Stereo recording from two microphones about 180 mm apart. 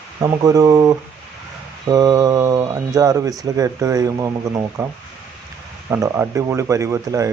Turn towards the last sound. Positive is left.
turn(degrees=-15)  # may be behind; listen again after turning